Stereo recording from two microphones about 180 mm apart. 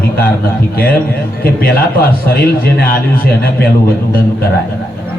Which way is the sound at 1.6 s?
60° left (ahead or behind).